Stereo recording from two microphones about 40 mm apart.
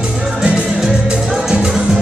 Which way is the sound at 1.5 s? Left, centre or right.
Centre.